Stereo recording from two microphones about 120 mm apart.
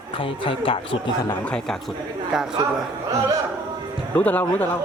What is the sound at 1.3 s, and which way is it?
Speech, 10° left (ahead or behind).